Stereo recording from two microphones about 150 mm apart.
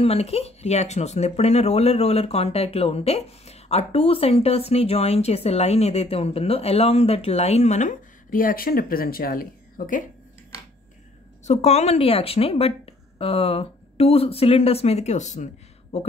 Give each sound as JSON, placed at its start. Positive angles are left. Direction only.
{"t": 0.0, "sound": "speech", "side_deg": 40}
{"t": 11.4, "sound": "a woman's voice", "side_deg": 45}